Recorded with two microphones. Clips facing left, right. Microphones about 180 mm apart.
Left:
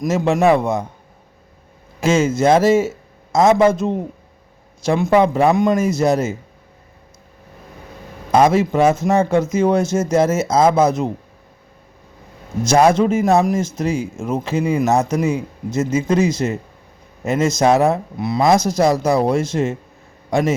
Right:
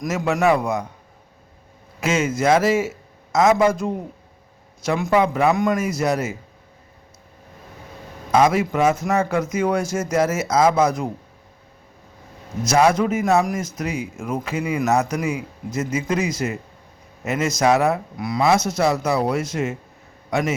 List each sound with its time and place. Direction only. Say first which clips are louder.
0.1 s speech: left 4 dB; 25° left (ahead or behind)
2.0 s speech: left 5 dB; 25° left (ahead or behind)
8.3 s speech: left 3 dB; 30° left (ahead or behind)
12.6 s speech: left 4 dB; 30° left (ahead or behind)